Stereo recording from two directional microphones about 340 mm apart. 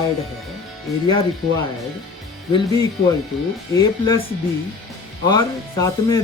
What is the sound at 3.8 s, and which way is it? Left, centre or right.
Speech, centre.